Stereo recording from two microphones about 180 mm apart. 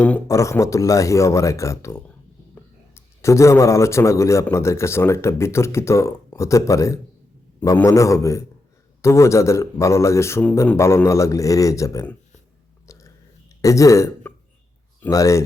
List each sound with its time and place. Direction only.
0.0 s a man's voice: 15° left (ahead or behind)
12.9 s a sound: 15° left (ahead or behind)
13.6 s a man's voice: 20° left (ahead or behind)